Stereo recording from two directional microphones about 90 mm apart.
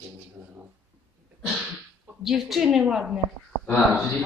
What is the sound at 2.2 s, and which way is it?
A woman's voice, centre (ahead or behind).